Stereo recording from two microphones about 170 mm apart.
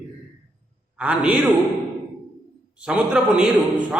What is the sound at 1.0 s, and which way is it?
Speech, 5° right (ahead or behind).